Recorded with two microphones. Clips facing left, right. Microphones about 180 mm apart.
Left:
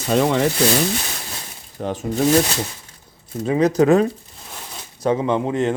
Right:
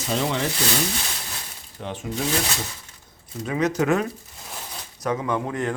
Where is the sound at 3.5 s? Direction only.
35° left (ahead or behind).